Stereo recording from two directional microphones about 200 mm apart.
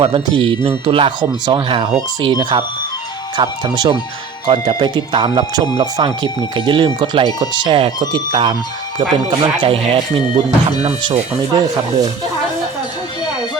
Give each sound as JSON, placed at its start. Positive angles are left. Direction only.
{"t": 0.0, "sound": "speech", "side_deg": -30}